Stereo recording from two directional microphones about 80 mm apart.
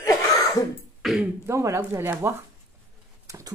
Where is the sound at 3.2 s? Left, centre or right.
Right.